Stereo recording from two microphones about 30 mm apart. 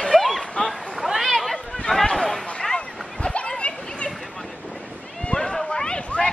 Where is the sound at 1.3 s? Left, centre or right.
Centre.